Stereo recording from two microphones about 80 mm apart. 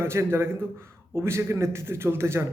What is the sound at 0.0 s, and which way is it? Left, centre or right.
A man's voice, right.